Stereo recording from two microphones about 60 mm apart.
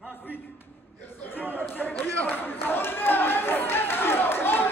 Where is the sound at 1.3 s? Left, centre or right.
Left.